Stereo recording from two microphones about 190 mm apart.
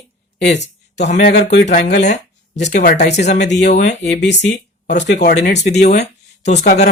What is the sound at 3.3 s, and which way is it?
Speech, 65° left (ahead or behind).